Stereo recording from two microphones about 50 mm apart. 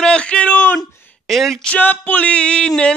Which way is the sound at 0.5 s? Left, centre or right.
Left.